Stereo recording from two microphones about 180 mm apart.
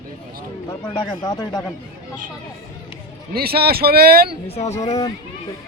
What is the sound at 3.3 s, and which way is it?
Speech, 60° right (ahead or behind).